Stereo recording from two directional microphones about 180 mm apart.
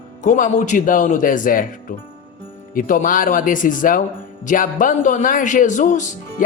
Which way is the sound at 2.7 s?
50° left (ahead or behind).